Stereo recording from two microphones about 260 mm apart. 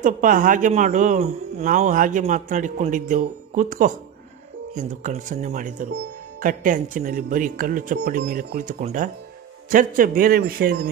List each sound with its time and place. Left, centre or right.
0.0 s speech: right